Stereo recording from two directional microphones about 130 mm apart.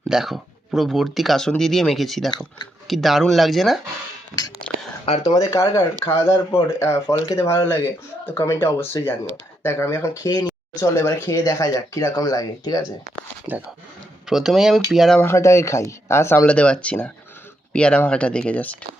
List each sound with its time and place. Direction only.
0.1 s speech: centre (ahead or behind)
5.2 s speech: 35° left (ahead or behind)
13.5 s speech: 15° right (ahead or behind)
14.3 s speech: 5° right (ahead or behind)
15.2 s speech: 20° left (ahead or behind)
16.5 s speech: 10° left (ahead or behind)